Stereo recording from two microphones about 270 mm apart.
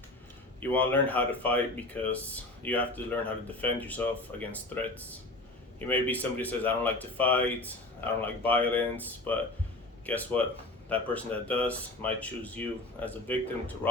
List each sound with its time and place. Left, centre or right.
0.6 s speech: centre
5.9 s speech: centre